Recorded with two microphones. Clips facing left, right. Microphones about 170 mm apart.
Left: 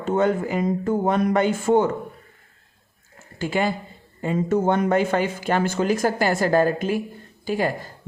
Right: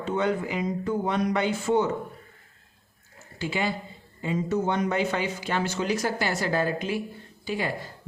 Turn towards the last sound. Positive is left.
turn(degrees=45)  # may be behind; listen again after turning